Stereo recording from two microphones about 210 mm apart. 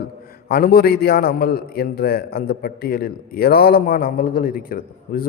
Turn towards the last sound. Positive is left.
turn(degrees=45)  # may be behind; listen again after turning